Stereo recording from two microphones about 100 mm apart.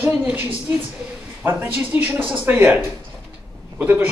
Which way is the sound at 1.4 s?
20° right (ahead or behind).